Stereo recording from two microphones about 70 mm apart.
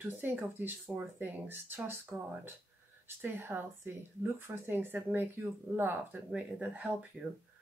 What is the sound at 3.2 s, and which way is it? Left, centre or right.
Speech, right.